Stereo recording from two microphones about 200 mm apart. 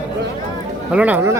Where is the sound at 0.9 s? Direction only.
10° right (ahead or behind).